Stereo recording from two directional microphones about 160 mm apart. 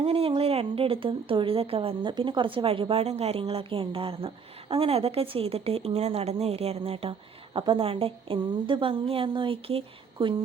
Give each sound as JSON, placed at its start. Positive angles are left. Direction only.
{"t": 0.0, "sound": "a woman's voice", "side_deg": -35}